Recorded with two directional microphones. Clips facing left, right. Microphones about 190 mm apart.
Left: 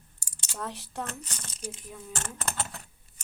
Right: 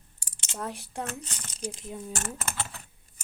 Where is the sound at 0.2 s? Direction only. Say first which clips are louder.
Right 2 dB; 20° right (ahead or behind).